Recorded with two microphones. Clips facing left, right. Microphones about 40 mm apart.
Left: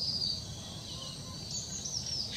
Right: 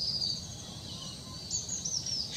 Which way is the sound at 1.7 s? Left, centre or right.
Centre.